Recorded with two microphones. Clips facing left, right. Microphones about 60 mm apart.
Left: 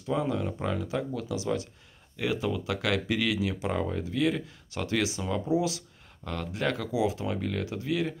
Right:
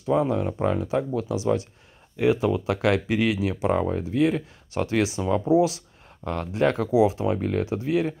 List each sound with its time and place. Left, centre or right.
0.1 s speech: right